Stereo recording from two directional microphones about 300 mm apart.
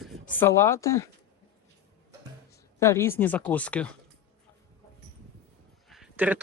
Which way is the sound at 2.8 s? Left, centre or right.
Centre.